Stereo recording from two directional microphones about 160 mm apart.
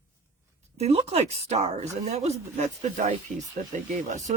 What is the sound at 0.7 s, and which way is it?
Speech, 40° right (ahead or behind).